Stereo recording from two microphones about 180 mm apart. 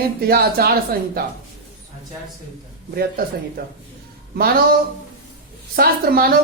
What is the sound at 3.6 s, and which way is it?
Speech, 60° right (ahead or behind).